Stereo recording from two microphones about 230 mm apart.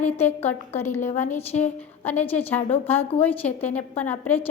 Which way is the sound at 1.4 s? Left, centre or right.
Left.